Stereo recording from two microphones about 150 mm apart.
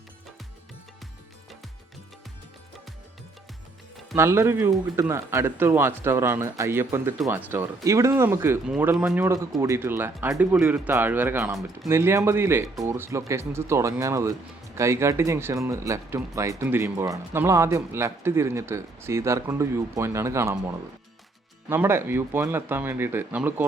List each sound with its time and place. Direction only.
4.1 s speech: 20° right (ahead or behind)
8.6 s speech: 5° right (ahead or behind)